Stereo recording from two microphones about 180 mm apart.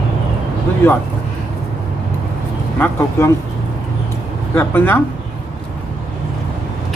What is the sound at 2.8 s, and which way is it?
Speech, 15° left (ahead or behind).